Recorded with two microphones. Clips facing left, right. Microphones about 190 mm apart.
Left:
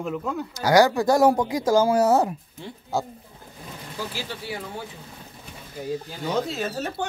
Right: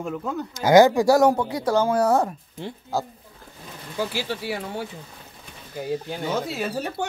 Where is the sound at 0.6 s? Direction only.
20° right (ahead or behind).